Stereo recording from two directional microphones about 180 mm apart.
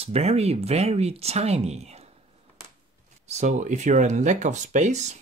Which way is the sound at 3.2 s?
40° right (ahead or behind).